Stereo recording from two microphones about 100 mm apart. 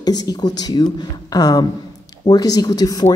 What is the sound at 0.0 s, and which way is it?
Speech, 40° left (ahead or behind).